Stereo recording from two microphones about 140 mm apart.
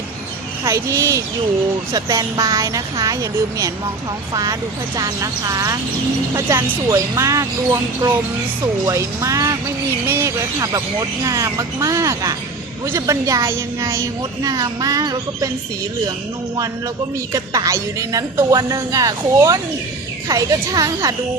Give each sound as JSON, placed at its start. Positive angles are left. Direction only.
{"t": 0.6, "sound": "speech", "side_deg": -20}
{"t": 4.9, "sound": "speech", "side_deg": -25}
{"t": 17.3, "sound": "speech", "side_deg": -25}